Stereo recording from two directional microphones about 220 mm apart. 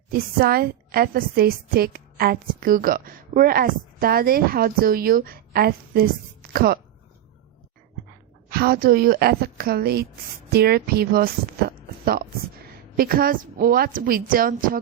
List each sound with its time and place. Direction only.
0.1 s a woman's voice: 40° right (ahead or behind)
8.4 s a woman's voice: 40° right (ahead or behind)